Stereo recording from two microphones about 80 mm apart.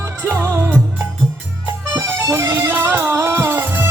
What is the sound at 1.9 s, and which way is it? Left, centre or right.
Music, right.